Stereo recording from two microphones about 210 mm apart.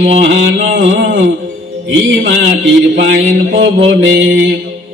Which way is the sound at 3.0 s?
55° right (ahead or behind).